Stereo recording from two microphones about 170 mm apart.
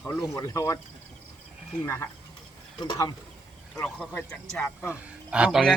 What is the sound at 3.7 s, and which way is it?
Speech, 10° left (ahead or behind).